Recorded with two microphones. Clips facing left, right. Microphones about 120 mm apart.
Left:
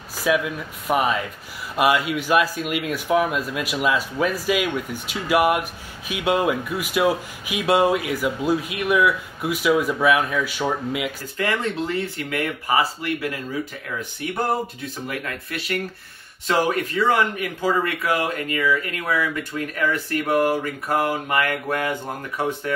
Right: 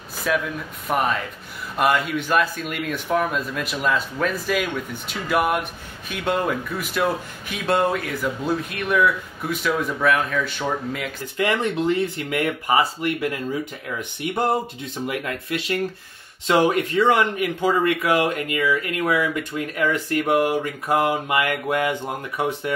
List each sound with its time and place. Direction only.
0.3 s speech: 5° left (ahead or behind)
11.3 s speech: 20° right (ahead or behind)
15.0 s speech: 20° right (ahead or behind)
19.6 s mantra: 20° right (ahead or behind)